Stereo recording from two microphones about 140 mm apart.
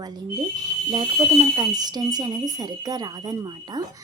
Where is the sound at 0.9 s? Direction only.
30° right (ahead or behind).